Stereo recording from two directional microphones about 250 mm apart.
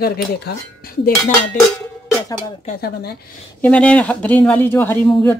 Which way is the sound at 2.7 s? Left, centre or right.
Left.